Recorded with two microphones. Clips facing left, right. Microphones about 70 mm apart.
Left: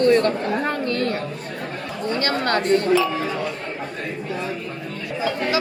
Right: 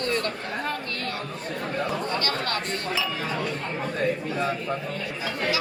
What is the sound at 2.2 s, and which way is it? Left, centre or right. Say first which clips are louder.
Speech: left 7 dB; left.